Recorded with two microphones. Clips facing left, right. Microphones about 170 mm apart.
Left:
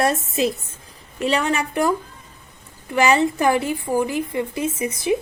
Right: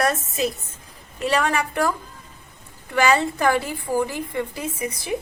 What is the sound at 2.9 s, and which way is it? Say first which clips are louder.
A woman's voice: left 2 dB; 20° left (ahead or behind).